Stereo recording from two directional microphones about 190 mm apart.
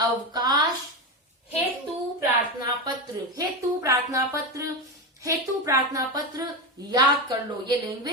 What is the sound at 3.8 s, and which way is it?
A woman's voice, 15° right (ahead or behind).